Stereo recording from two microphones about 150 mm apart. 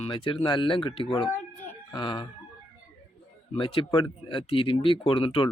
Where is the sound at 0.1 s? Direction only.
35° left (ahead or behind).